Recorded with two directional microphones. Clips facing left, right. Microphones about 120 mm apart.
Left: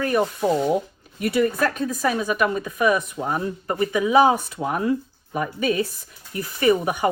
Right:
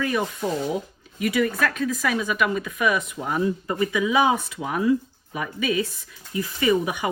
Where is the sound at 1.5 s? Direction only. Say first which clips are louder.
Left 1 dB; 40° left (ahead or behind).